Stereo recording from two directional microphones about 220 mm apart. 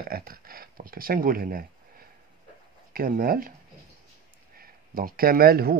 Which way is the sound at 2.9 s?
40° right (ahead or behind).